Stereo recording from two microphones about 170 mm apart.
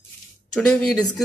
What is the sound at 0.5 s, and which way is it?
Speech, 5° left (ahead or behind).